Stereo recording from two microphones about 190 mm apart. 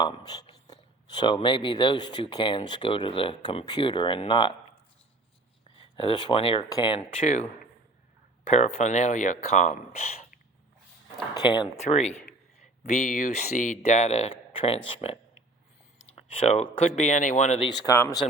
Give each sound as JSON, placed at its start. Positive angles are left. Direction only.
{"t": 0.0, "sound": "speech", "side_deg": 20}
{"t": 5.8, "sound": "speech", "side_deg": 30}
{"t": 11.4, "sound": "speech", "side_deg": 25}
{"t": 11.8, "sound": "speech", "side_deg": 35}
{"t": 17.7, "sound": "speech", "side_deg": 15}